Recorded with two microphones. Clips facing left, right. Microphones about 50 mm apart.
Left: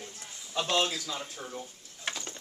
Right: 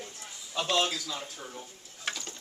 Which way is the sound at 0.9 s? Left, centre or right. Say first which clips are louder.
Even; centre.